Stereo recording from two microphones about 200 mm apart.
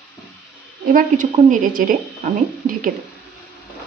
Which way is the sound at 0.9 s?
40° right (ahead or behind).